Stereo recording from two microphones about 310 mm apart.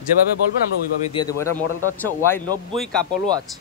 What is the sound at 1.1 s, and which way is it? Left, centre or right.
Speech, centre.